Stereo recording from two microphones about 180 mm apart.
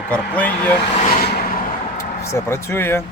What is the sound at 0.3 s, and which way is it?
Speech, 10° left (ahead or behind).